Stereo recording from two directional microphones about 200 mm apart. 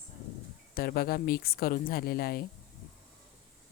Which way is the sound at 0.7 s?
50° left (ahead or behind).